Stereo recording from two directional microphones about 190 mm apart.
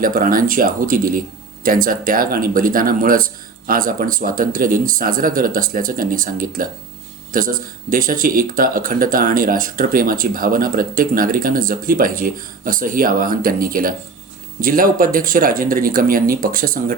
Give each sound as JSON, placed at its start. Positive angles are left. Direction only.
{"t": 0.0, "sound": "speech", "side_deg": -50}